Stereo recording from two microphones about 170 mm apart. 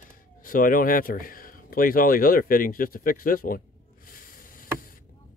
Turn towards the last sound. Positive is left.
turn(degrees=55)  # may be behind; listen again after turning